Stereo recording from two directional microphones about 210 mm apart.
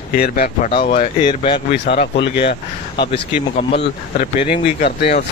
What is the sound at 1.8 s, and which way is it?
Speech, 50° left (ahead or behind).